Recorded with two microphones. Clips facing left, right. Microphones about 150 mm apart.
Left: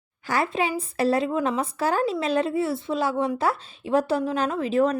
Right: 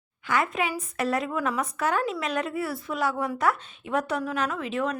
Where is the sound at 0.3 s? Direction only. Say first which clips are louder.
Left 2 dB; 35° left (ahead or behind).